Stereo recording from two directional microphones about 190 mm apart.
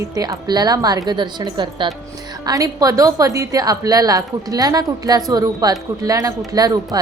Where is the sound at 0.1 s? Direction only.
20° right (ahead or behind).